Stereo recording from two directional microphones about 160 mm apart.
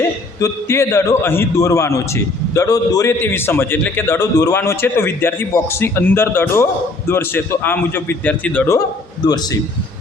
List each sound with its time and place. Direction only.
0.3 s a man's voice: 20° left (ahead or behind)
9.2 s a man's voice: 25° left (ahead or behind)